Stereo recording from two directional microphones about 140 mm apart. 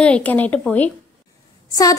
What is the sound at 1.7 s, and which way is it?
Speech, 25° left (ahead or behind).